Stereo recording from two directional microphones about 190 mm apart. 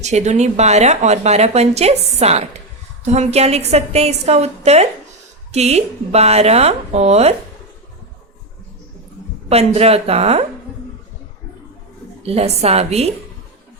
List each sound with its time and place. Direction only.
0.0 s a woman's voice: 35° right (ahead or behind)
9.5 s a woman's voice: 35° right (ahead or behind)
12.2 s a woman's voice: 30° right (ahead or behind)